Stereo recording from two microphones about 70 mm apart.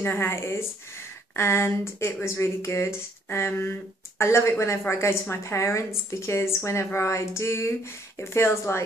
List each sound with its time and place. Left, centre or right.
0.0 s speech: left